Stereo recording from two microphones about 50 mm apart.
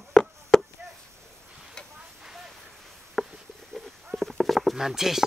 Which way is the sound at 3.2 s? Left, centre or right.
Centre.